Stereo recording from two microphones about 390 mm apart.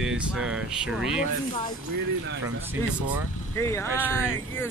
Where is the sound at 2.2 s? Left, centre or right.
Right.